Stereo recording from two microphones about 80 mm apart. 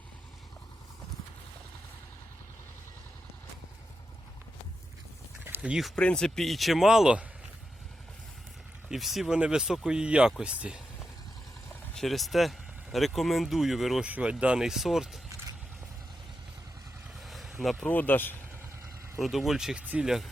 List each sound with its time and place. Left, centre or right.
6.0 s speech: centre
8.9 s speech: centre
11.9 s speech: centre
14.0 s speech: centre
17.2 s boat: centre
17.8 s speech: left
19.2 s speech: centre
19.8 s speech: centre